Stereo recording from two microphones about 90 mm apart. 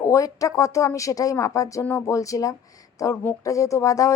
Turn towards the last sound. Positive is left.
turn(degrees=40)  # may be behind; listen again after turning